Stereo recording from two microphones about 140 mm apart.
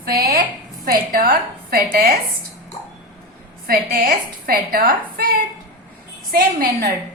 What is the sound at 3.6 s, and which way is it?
A woman's voice, 90° right.